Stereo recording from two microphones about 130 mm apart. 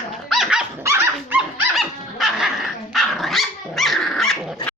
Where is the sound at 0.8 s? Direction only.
20° right (ahead or behind).